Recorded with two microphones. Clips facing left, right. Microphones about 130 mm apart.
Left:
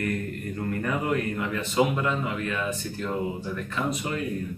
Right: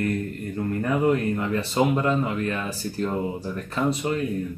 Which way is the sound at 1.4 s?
35° right (ahead or behind).